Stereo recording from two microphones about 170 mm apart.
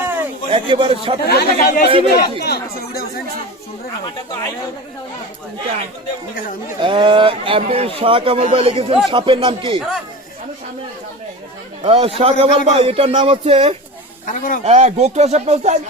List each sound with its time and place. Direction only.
0.0 s a sound: 10° right (ahead or behind)
0.5 s speech: 30° right (ahead or behind)
1.3 s speech: 65° left (ahead or behind)
1.9 s speech: 30° right (ahead or behind)
2.4 s speech: 65° left (ahead or behind)
6.8 s speech: 30° right (ahead or behind)
11.9 s speech: 35° right (ahead or behind)
14.3 s a man's voice: 50° left (ahead or behind)
14.6 s speech: 40° right (ahead or behind)